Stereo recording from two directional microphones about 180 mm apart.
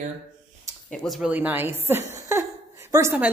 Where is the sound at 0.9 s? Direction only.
Centre (ahead or behind).